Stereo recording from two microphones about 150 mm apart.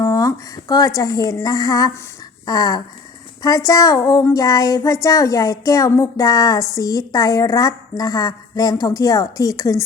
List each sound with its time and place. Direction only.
0.0 s speech: 20° left (ahead or behind)
2.5 s child singing: 25° left (ahead or behind)